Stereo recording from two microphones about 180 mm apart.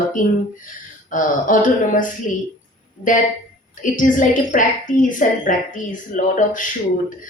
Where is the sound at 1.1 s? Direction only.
45° left (ahead or behind).